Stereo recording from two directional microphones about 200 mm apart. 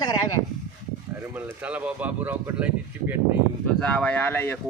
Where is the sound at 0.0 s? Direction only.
20° left (ahead or behind).